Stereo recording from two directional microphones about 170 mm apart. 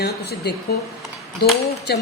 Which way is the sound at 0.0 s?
70° left (ahead or behind).